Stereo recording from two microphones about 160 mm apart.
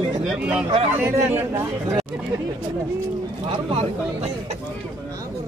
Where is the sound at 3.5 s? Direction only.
40° right (ahead or behind).